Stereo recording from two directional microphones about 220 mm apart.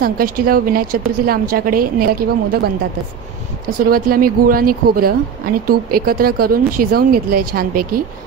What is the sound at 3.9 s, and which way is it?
A woman's voice, 40° right (ahead or behind).